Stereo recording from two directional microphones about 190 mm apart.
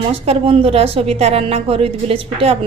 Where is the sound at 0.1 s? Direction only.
30° right (ahead or behind).